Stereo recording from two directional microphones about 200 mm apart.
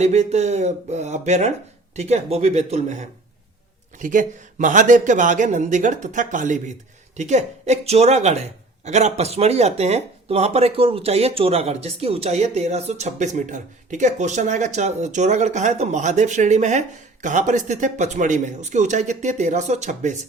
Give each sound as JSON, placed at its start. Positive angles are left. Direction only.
{"t": 0.0, "sound": "speech", "side_deg": -35}